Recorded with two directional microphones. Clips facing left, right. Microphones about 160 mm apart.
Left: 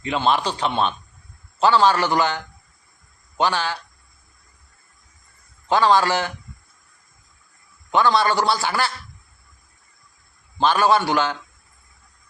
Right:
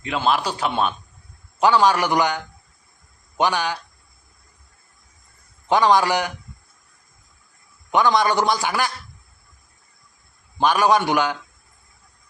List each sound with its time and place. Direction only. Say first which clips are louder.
0.0 s a man's voice: left 1 dB; 5° right (ahead or behind)
5.6 s a man's voice: even; 15° right (ahead or behind)
7.9 s a man's voice: even; 15° right (ahead or behind)
10.6 s a man's voice: even; 15° right (ahead or behind)